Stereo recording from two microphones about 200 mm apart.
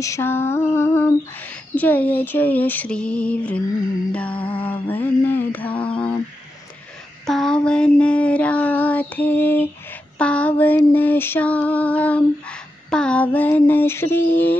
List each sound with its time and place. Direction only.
0.0 s female singing: 15° left (ahead or behind)
4.4 s music: 25° left (ahead or behind)
4.6 s female singing: 10° left (ahead or behind)
7.2 s female singing: 5° left (ahead or behind)